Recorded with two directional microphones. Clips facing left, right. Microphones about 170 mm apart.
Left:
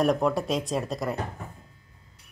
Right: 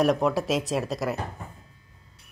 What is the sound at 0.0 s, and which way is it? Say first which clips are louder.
Speech: right 1 dB; centre (ahead or behind).